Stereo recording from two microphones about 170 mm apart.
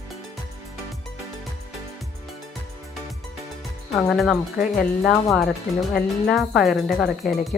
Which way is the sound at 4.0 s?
Centre (ahead or behind).